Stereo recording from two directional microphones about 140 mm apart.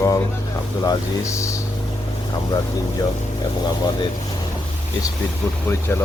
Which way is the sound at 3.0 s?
25° left (ahead or behind).